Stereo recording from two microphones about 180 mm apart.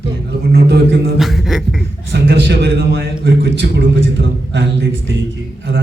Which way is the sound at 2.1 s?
70° right (ahead or behind).